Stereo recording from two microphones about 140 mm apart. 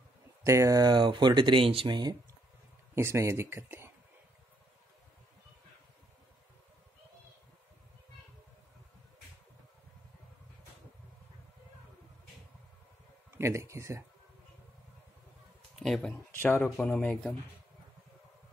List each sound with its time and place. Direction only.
0.4 s speech: 20° right (ahead or behind)
2.9 s speech: 20° right (ahead or behind)
13.4 s speech: 20° right (ahead or behind)
15.7 s speech: centre (ahead or behind)
16.3 s speech: 15° left (ahead or behind)